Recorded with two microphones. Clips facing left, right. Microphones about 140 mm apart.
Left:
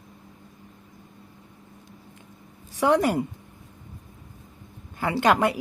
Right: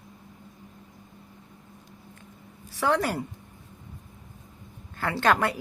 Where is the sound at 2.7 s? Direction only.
15° left (ahead or behind).